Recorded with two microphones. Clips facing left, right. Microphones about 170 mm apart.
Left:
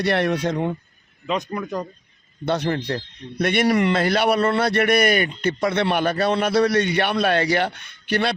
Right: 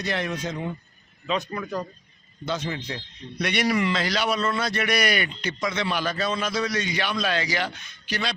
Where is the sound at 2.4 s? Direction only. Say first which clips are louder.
Left 7 dB; 65° left (ahead or behind).